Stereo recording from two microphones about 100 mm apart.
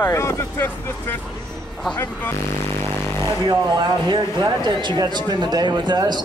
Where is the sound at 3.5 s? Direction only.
50° right (ahead or behind).